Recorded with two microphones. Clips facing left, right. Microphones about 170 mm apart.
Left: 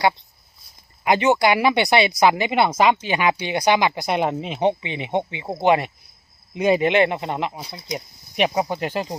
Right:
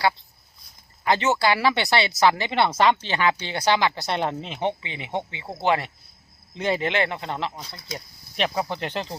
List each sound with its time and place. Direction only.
1.0 s speech: 15° left (ahead or behind)